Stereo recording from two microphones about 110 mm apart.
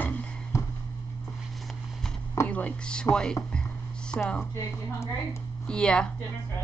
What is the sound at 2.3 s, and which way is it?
Speech, 15° left (ahead or behind).